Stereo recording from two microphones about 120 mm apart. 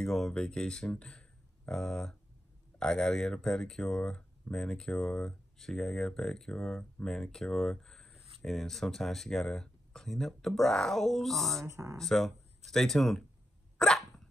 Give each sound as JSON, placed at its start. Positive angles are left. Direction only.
{"t": 0.0, "sound": "speech", "side_deg": 5}
{"t": 11.6, "sound": "speech", "side_deg": -25}
{"t": 12.0, "sound": "speech", "side_deg": 0}
{"t": 13.7, "sound": "dog", "side_deg": 5}